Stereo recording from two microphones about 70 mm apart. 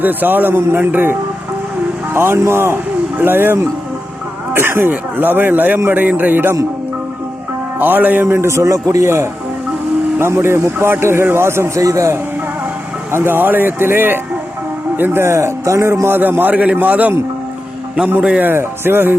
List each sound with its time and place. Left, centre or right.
0.0 s a man's voice: right
2.1 s a man's voice: right
7.8 s a man's voice: right
10.2 s a man's voice: right
13.1 s a man's voice: right
16.2 s a man's voice: right
18.4 s a man's voice: right